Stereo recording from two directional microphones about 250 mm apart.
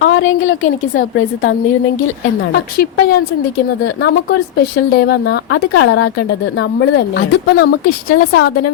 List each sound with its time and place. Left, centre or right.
0.0 s a woman's voice: left
2.5 s speech: left
8.1 s a woman's voice: left